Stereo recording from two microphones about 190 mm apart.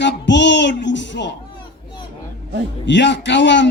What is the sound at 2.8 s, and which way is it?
Speech, 70° left (ahead or behind).